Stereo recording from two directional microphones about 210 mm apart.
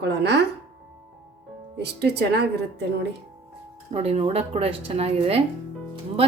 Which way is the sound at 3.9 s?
30° right (ahead or behind).